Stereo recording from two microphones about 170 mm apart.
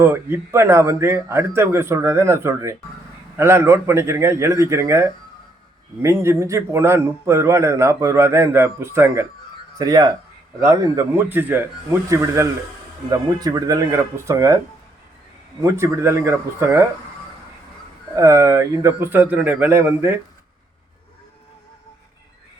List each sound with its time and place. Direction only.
0.0 s a man's voice: 15° right (ahead or behind)
15.6 s a man's voice: 15° right (ahead or behind)
18.2 s a man's voice: 15° right (ahead or behind)